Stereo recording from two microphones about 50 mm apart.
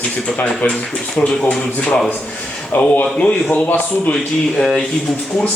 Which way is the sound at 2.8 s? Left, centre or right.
Left.